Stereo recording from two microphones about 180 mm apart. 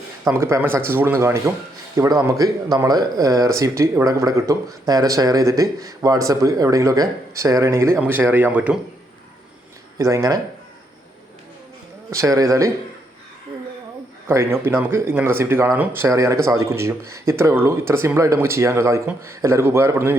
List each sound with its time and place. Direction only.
0.3 s speech: 15° right (ahead or behind)
10.0 s speech: 15° right (ahead or behind)
12.1 s speech: 15° right (ahead or behind)
14.3 s speech: 15° right (ahead or behind)